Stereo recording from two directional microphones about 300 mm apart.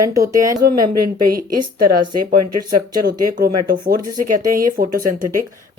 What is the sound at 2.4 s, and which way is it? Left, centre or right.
Speech, right.